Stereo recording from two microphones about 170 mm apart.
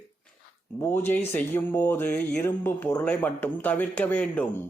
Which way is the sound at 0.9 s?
10° left (ahead or behind).